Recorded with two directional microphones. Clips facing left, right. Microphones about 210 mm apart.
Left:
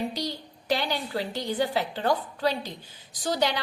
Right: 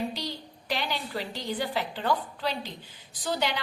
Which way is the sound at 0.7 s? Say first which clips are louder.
Left 4 dB; 45° left (ahead or behind).